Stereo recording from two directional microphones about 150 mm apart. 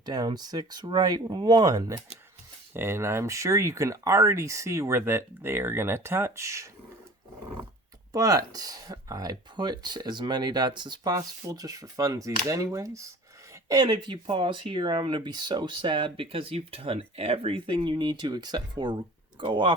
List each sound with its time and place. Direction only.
0.0 s speech: 25° right (ahead or behind)
8.1 s speech: 25° right (ahead or behind)